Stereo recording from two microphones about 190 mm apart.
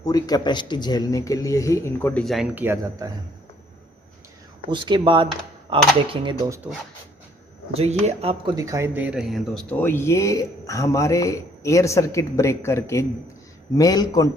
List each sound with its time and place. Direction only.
0.0 s speech: 20° left (ahead or behind); by 3.1 s 10° right (ahead or behind)
4.7 s speech: 25° right (ahead or behind)
6.2 s speech: 15° right (ahead or behind)
7.7 s speech: 35° right (ahead or behind)
8.5 s a man's voice: 15° right (ahead or behind); by 14.3 s 20° left (ahead or behind)